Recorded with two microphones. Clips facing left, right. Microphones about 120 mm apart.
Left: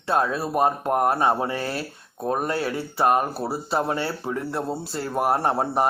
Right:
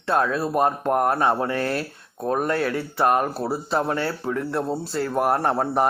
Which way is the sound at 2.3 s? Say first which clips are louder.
Right 3 dB; 30° left (ahead or behind).